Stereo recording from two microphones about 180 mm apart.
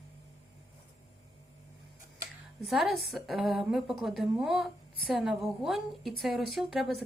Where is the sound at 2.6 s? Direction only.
Centre (ahead or behind).